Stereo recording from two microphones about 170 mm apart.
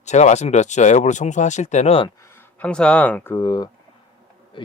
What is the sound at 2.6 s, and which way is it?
A man's voice, 5° left (ahead or behind).